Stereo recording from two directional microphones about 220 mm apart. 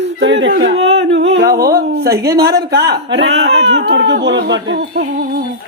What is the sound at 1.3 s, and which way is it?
Speech, 45° right (ahead or behind).